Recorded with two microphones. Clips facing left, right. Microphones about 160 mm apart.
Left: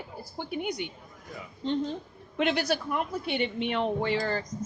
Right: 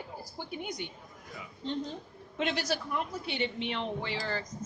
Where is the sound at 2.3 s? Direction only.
60° left (ahead or behind).